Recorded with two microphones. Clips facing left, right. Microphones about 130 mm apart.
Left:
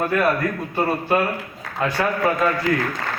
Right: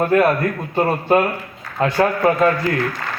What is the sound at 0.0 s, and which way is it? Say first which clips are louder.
Speech: right 6 dB; 30° right (ahead or behind).